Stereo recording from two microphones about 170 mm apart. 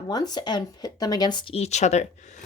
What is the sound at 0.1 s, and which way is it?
Speech, 25° left (ahead or behind).